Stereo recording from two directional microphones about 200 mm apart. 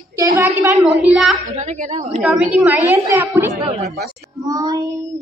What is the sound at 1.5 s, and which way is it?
Speech, 35° right (ahead or behind).